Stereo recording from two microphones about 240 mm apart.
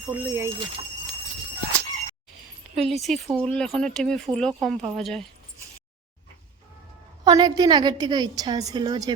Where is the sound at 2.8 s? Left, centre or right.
Centre.